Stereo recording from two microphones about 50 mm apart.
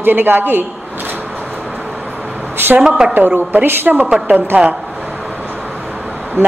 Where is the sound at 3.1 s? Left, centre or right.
Right.